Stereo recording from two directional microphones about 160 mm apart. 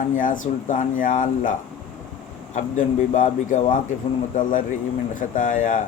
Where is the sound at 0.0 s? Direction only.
55° left (ahead or behind).